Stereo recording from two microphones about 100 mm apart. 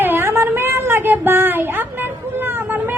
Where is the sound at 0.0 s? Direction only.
20° right (ahead or behind).